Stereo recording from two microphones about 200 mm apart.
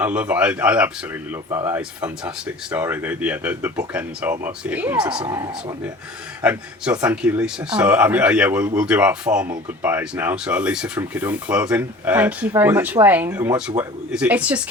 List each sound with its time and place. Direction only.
0.0 s speech: 5° right (ahead or behind)
5.2 s speech: 20° right (ahead or behind)
6.4 s a man's voice: 5° right (ahead or behind)